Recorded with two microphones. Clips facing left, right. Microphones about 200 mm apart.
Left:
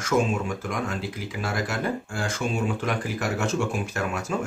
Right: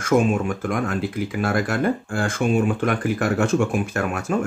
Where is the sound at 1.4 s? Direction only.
55° right (ahead or behind).